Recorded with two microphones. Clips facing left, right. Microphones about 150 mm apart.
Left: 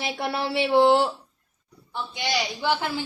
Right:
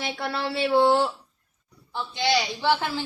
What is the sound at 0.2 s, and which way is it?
Speech, 15° left (ahead or behind).